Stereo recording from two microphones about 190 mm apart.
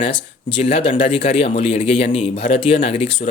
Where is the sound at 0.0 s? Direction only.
30° left (ahead or behind).